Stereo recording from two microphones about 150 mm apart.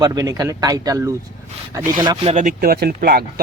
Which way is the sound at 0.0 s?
25° right (ahead or behind).